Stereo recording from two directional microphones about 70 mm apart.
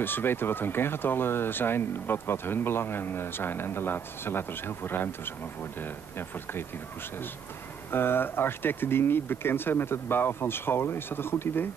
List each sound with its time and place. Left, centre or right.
0.0 s speech: left
7.9 s speech: left